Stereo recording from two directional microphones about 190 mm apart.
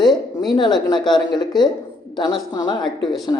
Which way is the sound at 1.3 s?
20° left (ahead or behind).